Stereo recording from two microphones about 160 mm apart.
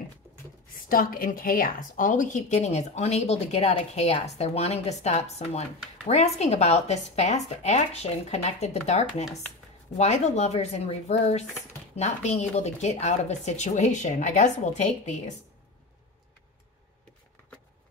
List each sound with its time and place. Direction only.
0.8 s a woman's voice: 60° left (ahead or behind)